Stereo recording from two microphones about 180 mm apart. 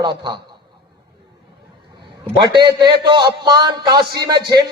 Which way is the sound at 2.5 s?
25° right (ahead or behind).